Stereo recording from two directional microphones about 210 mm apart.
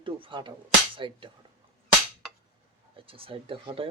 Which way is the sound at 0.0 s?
25° right (ahead or behind).